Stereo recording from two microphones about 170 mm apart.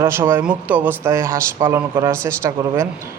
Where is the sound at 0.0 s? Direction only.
15° right (ahead or behind).